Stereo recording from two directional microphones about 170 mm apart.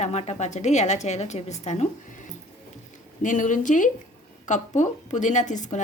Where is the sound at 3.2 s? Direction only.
50° left (ahead or behind).